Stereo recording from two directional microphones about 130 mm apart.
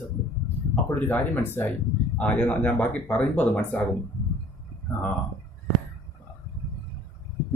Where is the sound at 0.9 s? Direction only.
15° left (ahead or behind).